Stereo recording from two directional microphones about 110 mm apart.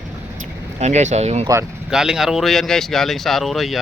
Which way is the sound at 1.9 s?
5° right (ahead or behind).